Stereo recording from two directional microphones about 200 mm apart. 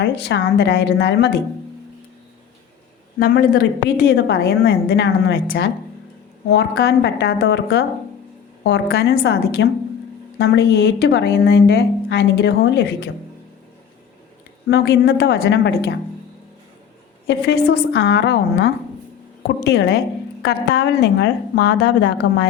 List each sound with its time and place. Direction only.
0.0 s a woman's voice: 60° left (ahead or behind)
3.2 s a woman's voice: 50° left (ahead or behind)
14.7 s a woman's voice: 55° left (ahead or behind)
17.2 s a woman's voice: 55° left (ahead or behind)